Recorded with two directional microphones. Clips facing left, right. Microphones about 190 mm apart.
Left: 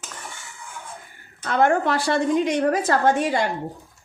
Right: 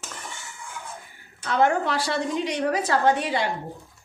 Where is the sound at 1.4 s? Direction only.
50° left (ahead or behind).